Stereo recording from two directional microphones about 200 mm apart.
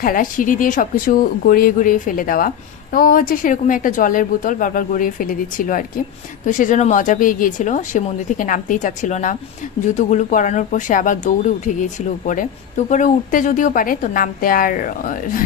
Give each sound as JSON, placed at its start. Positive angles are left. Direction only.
{"t": 0.0, "sound": "a woman's voice", "side_deg": 45}